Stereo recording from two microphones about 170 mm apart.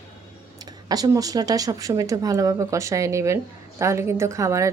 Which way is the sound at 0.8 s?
20° right (ahead or behind).